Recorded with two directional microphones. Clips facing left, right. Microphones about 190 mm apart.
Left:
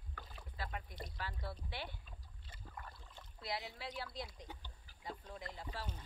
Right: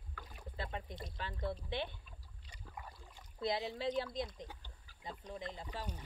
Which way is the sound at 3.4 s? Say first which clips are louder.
Right 8 dB; 25° right (ahead or behind).